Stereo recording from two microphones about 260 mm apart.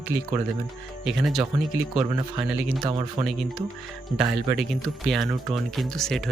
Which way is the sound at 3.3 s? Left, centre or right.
Centre.